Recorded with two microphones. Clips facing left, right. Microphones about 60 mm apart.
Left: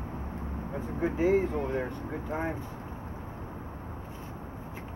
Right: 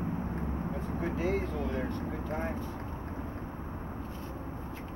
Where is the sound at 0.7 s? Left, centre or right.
Centre.